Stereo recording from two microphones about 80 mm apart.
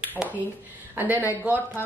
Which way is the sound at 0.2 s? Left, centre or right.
Centre.